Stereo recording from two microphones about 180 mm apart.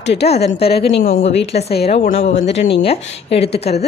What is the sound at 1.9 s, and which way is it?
A woman's voice, 35° left (ahead or behind).